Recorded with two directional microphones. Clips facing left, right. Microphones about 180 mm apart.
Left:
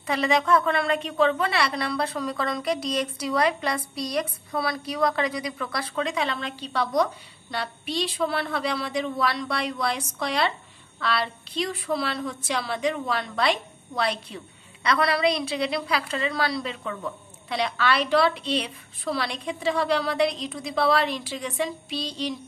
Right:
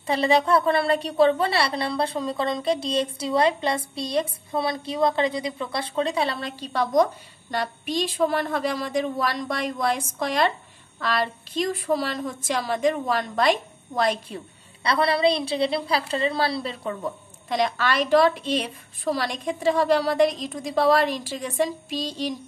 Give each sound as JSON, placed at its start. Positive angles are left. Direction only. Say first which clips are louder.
{"t": 0.0, "sound": "a woman's voice", "louder": "right 3 dB", "side_deg": -30}